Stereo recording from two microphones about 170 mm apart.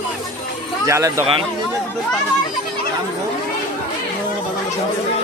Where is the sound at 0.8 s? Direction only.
15° right (ahead or behind).